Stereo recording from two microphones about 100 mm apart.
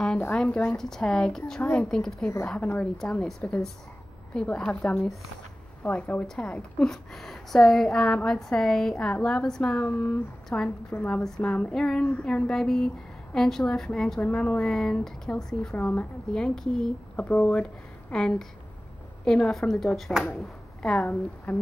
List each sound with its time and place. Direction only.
0.3 s speech: 10° left (ahead or behind)
1.6 s speech: 15° left (ahead or behind)
1.9 s a woman's voice: 5° left (ahead or behind)
17.2 s speech: 15° left (ahead or behind)